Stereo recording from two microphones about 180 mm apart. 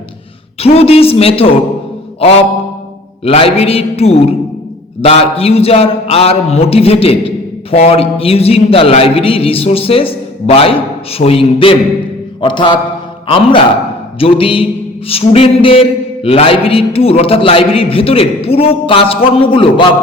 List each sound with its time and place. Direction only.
0.6 s a man's voice: 35° left (ahead or behind)
3.2 s a man's voice: 30° left (ahead or behind)